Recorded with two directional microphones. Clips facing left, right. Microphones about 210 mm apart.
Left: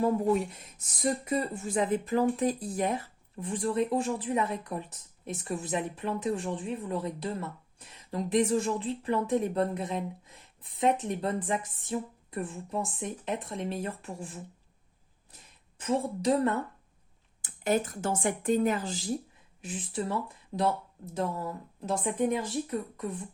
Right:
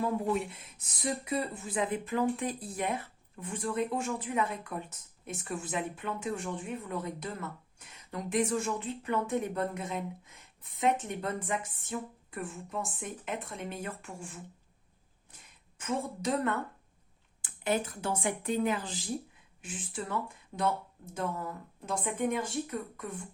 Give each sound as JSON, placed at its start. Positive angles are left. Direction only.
{"t": 0.0, "sound": "a woman's voice", "side_deg": 40}
{"t": 15.8, "sound": "speech", "side_deg": 35}
{"t": 23.0, "sound": "speech", "side_deg": 35}